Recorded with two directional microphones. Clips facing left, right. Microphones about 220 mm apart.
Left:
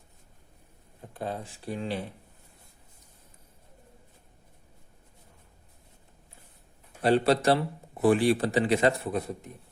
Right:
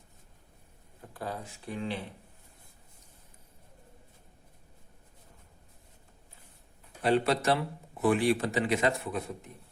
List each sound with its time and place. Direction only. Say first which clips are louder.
1.1 s a sound: left 3 dB; 25° left (ahead or behind)
1.6 s speech: left 2 dB; 35° left (ahead or behind)
7.0 s speech: left 4 dB; 35° left (ahead or behind)